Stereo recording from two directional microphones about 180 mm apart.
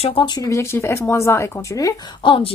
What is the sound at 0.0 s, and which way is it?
A woman's voice, 30° left (ahead or behind).